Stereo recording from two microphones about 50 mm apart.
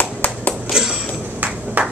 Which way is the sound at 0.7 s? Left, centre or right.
Centre.